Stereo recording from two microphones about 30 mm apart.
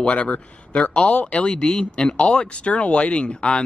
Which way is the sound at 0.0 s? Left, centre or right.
Left.